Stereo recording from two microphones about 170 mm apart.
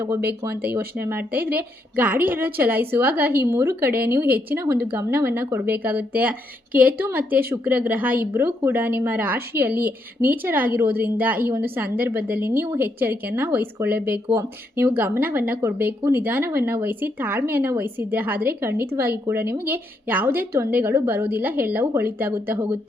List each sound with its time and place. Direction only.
0.6 s a woman's voice: 10° right (ahead or behind)
7.0 s a woman's voice: 10° right (ahead or behind)